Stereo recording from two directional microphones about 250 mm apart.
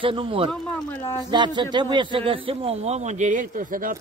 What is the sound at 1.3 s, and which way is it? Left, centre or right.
A man's voice, centre.